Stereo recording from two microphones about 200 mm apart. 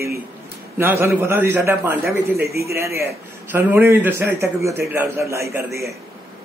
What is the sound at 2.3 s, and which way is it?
Speech, 50° right (ahead or behind).